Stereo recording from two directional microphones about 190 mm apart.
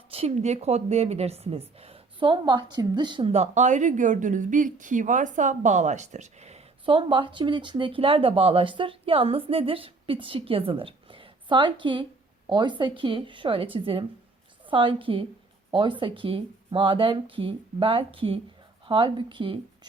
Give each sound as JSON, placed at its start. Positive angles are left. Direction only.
{"t": 0.1, "sound": "a woman's voice", "side_deg": -30}